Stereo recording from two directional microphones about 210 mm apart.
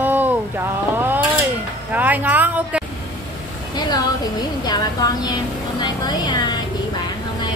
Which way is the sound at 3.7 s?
20° left (ahead or behind).